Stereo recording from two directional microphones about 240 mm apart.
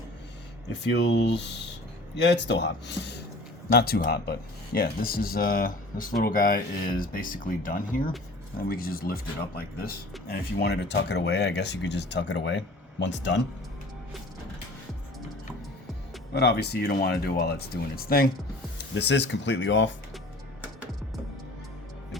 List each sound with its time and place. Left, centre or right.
0.7 s speech: left
16.3 s speech: left